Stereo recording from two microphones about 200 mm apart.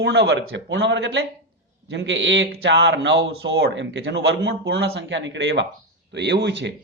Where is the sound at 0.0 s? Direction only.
60° right (ahead or behind).